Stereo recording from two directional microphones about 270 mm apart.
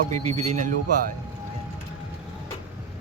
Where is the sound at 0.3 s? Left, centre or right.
Right.